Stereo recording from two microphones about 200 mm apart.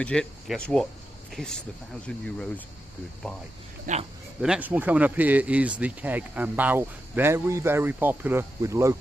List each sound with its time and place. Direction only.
0.0 s speech: 5° left (ahead or behind)
3.9 s a man's voice: 40° right (ahead or behind)
4.4 s speech: 5° right (ahead or behind)